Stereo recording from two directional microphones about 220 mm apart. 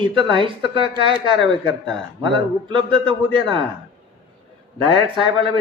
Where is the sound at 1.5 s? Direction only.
55° left (ahead or behind).